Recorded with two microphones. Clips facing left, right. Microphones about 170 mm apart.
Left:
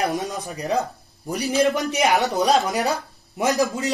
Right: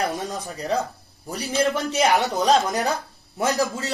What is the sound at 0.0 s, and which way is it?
A man's voice, 15° left (ahead or behind).